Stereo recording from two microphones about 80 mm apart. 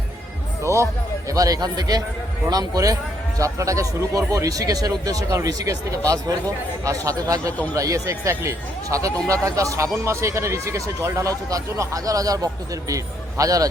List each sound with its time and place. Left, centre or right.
0.6 s speech: right
1.3 s a man's voice: right
6.8 s a man's voice: right